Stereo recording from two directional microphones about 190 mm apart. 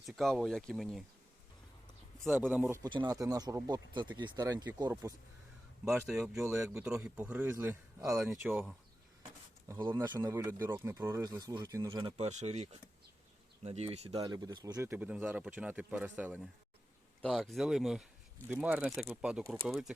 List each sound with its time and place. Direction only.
0.0 s speech: centre (ahead or behind)
2.5 s speech: 10° right (ahead or behind)
5.8 s speech: 10° right (ahead or behind)
6.4 s speech: 15° right (ahead or behind)
9.6 s speech: 25° right (ahead or behind); by 19.9 s centre (ahead or behind)